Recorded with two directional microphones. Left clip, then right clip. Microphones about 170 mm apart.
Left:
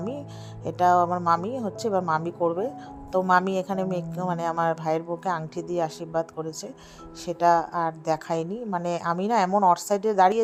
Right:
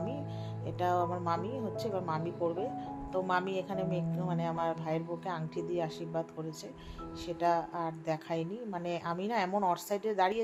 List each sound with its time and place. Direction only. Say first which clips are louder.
0.6 s speech: left 11 dB; 50° left (ahead or behind)